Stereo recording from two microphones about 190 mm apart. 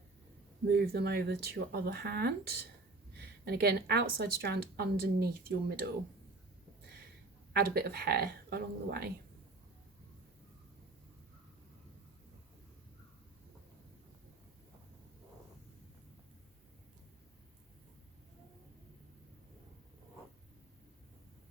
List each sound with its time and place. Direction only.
0.7 s a woman's voice: 55° right (ahead or behind)
7.5 s a woman's voice: 55° right (ahead or behind)